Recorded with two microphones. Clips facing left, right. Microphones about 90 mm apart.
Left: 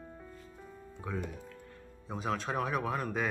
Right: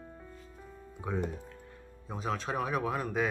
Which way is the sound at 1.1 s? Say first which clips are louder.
Right 4 dB; 20° right (ahead or behind).